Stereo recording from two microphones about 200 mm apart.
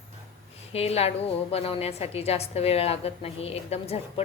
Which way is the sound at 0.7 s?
30° left (ahead or behind).